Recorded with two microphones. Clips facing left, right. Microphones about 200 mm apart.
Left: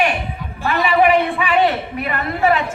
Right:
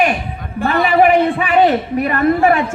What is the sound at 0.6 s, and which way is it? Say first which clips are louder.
A man's voice: right 3 dB; 55° right (ahead or behind).